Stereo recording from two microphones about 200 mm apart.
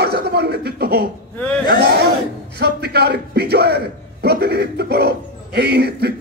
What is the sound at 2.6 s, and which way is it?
A man's voice, 55° right (ahead or behind).